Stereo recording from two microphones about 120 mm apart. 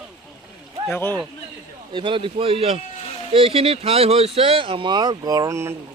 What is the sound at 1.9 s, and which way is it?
Speech, 45° right (ahead or behind).